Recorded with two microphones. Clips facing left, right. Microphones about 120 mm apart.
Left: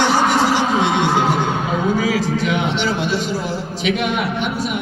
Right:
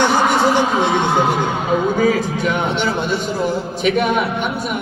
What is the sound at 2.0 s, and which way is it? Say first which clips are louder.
Speech: right 2 dB; 55° right (ahead or behind).